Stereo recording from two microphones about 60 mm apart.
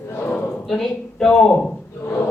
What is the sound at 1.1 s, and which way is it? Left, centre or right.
Speech, centre.